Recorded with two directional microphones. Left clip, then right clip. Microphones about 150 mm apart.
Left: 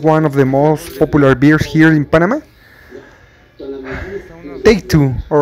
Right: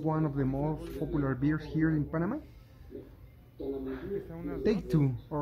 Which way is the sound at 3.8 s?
45° left (ahead or behind).